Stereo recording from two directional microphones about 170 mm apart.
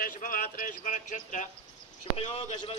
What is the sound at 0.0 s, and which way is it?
A man's voice, 50° left (ahead or behind).